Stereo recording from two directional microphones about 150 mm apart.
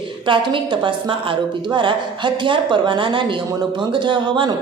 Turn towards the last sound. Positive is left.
turn(degrees=-35)  # may be behind; listen again after turning